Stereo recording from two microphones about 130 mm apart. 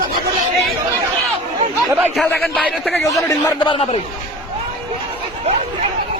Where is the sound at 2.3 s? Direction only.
5° left (ahead or behind).